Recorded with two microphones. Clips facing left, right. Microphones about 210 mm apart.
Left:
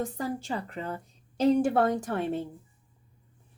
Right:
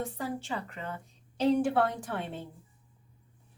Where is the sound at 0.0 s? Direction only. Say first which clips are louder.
Left 3 dB; 40° left (ahead or behind).